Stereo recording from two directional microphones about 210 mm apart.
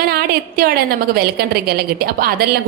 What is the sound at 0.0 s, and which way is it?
A woman's voice, 45° right (ahead or behind).